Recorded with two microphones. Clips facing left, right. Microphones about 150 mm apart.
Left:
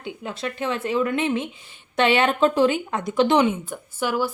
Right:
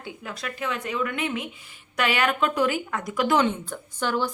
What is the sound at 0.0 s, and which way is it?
Speech, 25° left (ahead or behind).